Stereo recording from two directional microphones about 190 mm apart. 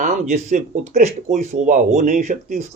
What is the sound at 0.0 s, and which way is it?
A man's voice, 40° right (ahead or behind).